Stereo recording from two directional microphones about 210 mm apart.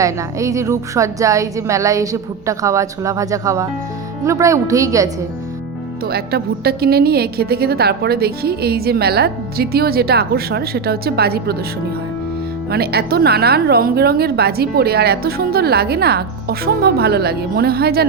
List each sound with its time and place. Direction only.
0.0 s a woman's voice: 15° right (ahead or behind)
6.1 s a woman's voice: 45° right (ahead or behind)
12.7 s a woman's voice: 50° right (ahead or behind)